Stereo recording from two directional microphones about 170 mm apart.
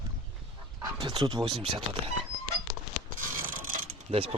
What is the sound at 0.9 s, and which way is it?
Speech, 25° right (ahead or behind).